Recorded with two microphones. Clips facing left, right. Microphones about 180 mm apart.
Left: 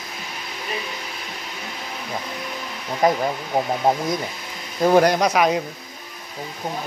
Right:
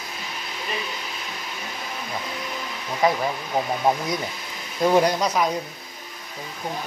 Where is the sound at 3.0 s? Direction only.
50° left (ahead or behind).